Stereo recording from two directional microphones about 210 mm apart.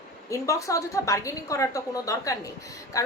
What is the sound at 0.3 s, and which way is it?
A woman's voice, 15° left (ahead or behind).